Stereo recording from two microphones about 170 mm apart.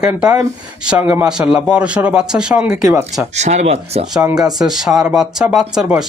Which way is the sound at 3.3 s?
40° right (ahead or behind).